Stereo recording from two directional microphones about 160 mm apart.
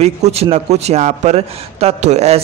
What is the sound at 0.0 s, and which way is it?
A man's voice, 40° right (ahead or behind).